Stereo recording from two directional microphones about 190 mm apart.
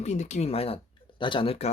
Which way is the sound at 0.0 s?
35° left (ahead or behind).